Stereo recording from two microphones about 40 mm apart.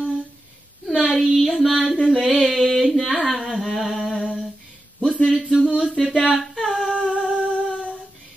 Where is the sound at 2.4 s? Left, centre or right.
Centre.